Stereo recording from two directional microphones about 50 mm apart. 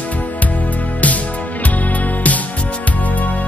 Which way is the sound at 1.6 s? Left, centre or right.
Left.